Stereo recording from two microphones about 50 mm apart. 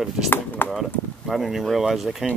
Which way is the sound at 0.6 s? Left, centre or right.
Left.